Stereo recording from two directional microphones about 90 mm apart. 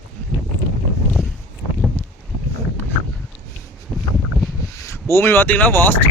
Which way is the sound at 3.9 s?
5° right (ahead or behind).